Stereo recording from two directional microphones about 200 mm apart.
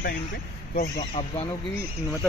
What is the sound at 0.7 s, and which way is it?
Speech, 40° left (ahead or behind).